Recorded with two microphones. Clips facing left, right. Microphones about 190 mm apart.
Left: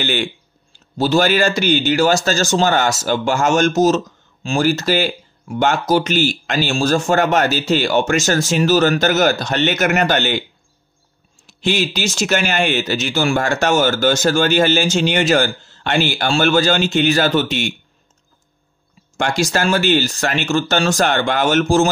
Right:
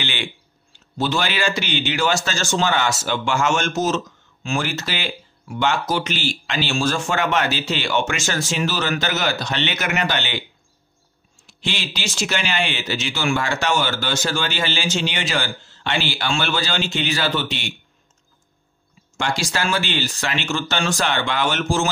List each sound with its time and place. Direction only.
0.0 s a man's voice: 45° left (ahead or behind)
11.4 s a man's voice: 45° left (ahead or behind)
19.1 s a man's voice: 50° left (ahead or behind)